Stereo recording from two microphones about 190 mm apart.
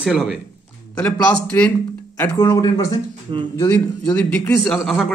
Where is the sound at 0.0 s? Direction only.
Centre (ahead or behind).